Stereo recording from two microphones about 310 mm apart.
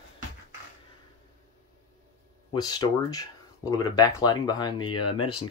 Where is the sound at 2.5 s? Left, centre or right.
Centre.